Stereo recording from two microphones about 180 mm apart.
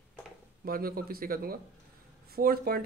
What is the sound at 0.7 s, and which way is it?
Speech, 55° right (ahead or behind).